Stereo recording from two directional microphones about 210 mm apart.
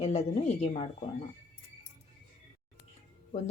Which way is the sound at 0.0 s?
30° left (ahead or behind).